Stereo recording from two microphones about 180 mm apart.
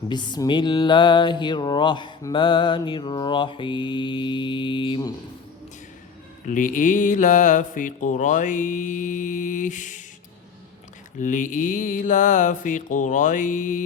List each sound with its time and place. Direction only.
0.1 s music: 25° left (ahead or behind)
6.5 s mantra: 45° left (ahead or behind)
11.2 s mantra: 45° left (ahead or behind)